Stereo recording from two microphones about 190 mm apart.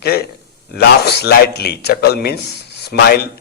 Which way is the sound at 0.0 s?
55° left (ahead or behind).